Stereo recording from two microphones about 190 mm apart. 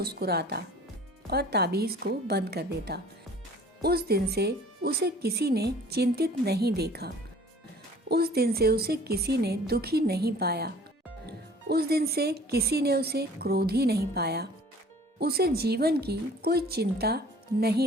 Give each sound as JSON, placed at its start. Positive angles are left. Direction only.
{"t": 0.0, "sound": "speech", "side_deg": -55}
{"t": 8.1, "sound": "speech", "side_deg": -55}